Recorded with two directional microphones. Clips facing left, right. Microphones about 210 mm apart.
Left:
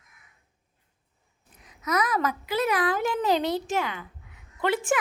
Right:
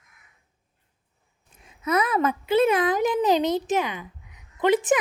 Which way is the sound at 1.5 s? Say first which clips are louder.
Right 4 dB; 25° right (ahead or behind).